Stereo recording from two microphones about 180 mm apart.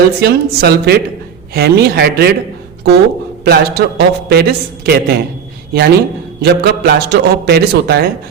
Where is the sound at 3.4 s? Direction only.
60° right (ahead or behind).